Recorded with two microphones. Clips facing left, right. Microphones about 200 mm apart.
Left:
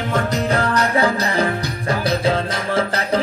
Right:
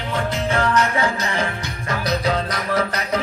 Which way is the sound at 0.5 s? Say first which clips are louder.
Even; 35° left (ahead or behind).